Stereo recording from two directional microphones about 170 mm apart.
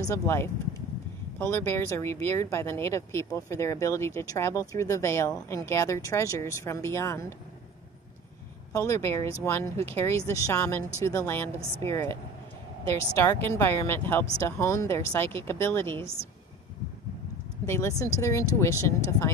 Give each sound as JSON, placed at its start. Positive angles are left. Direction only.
{"t": 0.0, "sound": "speech", "side_deg": 15}
{"t": 8.7, "sound": "speech", "side_deg": 15}
{"t": 13.2, "sound": "speech", "side_deg": 15}
{"t": 17.6, "sound": "speech", "side_deg": 15}